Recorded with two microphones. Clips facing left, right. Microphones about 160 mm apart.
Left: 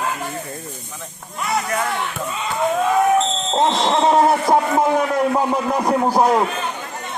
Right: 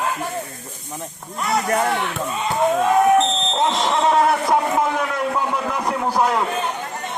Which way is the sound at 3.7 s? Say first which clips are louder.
Left 2 dB; 30° left (ahead or behind).